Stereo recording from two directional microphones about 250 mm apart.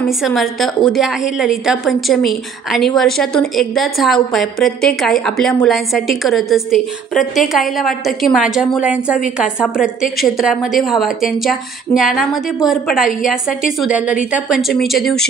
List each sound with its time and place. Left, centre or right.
0.2 s a woman's voice: centre